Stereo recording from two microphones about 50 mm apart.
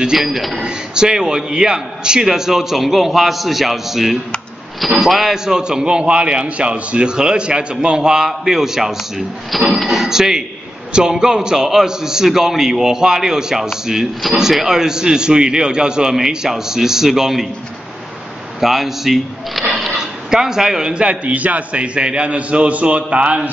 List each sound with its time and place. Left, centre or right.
0.0 s speech: centre
0.7 s a man's voice: centre
18.6 s speech: centre
19.7 s a sound: centre
20.9 s a man's voice: right